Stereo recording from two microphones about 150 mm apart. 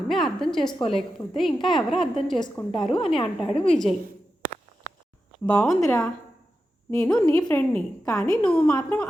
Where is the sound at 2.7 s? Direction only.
35° left (ahead or behind).